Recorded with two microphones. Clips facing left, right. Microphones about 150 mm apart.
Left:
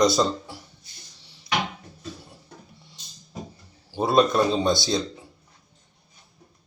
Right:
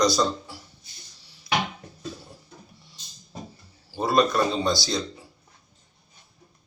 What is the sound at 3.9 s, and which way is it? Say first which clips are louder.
Speech: left 2 dB; 20° left (ahead or behind).